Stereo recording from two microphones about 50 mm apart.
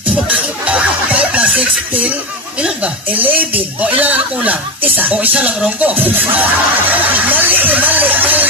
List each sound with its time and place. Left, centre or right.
0.3 s music: right
2.6 s speech: right
6.9 s a sound: right